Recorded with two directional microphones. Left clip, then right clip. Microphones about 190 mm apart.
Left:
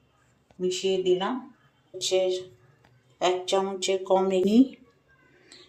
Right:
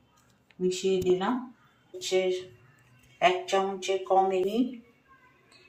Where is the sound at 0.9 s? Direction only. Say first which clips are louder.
Left 1 dB; 55° left (ahead or behind).